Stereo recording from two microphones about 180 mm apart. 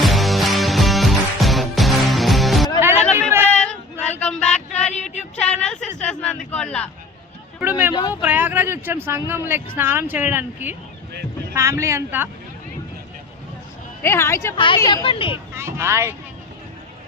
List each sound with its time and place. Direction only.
0.0 s music: centre (ahead or behind)
3.4 s child singing: 5° left (ahead or behind)
4.9 s a sound: 40° left (ahead or behind)
5.4 s a sound: 5° left (ahead or behind)
7.6 s vehicle: 10° right (ahead or behind)
7.9 s vehicle: 20° left (ahead or behind)
8.2 s a sound: 10° right (ahead or behind)
9.7 s a woman's voice: 10° right (ahead or behind)
14.0 s speech: 15° left (ahead or behind)
14.5 s speech: 30° left (ahead or behind)
14.8 s speech: 20° left (ahead or behind)
15.0 s speech: 30° left (ahead or behind)
15.5 s a woman's voice: 15° right (ahead or behind)